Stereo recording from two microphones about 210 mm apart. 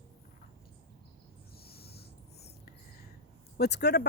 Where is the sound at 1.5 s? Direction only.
45° left (ahead or behind).